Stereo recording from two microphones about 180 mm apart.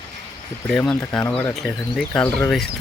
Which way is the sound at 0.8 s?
10° left (ahead or behind).